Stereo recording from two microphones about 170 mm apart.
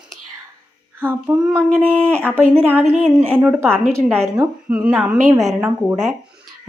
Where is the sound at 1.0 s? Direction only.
10° right (ahead or behind).